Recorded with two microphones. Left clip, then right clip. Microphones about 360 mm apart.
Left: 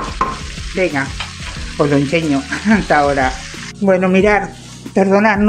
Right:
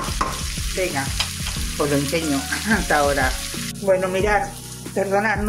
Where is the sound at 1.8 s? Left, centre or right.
Right.